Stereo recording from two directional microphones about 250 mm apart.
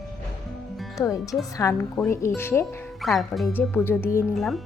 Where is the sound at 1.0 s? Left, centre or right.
Centre.